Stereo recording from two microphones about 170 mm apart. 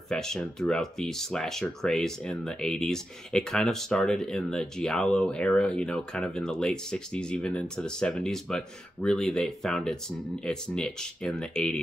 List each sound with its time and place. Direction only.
0.1 s speech: 5° left (ahead or behind)